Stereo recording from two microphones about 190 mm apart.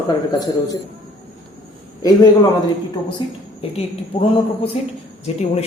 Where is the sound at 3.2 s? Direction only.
25° left (ahead or behind).